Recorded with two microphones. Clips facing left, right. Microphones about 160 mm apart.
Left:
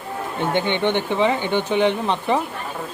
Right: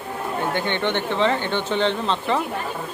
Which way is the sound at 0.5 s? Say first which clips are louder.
Left 6 dB; 15° left (ahead or behind).